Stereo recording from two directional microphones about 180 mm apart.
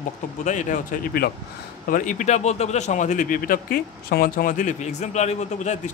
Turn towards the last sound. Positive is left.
turn(degrees=40)  # may be behind; listen again after turning